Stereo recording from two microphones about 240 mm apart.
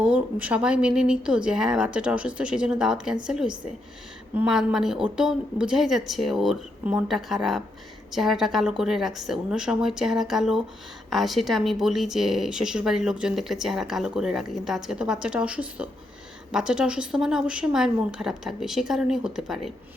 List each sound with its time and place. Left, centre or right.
0.0 s speech: centre